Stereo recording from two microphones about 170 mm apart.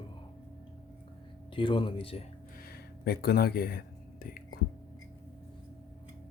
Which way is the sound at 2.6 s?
65° left (ahead or behind).